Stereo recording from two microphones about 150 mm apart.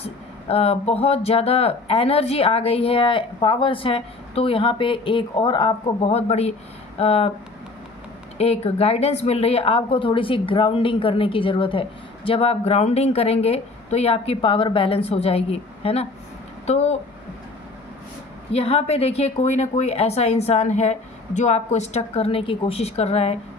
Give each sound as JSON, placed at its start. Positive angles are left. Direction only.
{"t": 0.0, "sound": "a woman's voice", "side_deg": 40}
{"t": 8.4, "sound": "a woman's voice", "side_deg": 40}
{"t": 18.5, "sound": "a woman's voice", "side_deg": 45}